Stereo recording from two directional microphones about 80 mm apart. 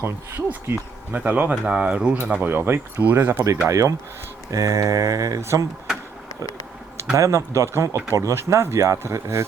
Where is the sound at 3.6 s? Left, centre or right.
Right.